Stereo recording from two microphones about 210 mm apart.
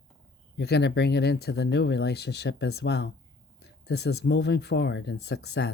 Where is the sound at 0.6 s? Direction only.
50° left (ahead or behind).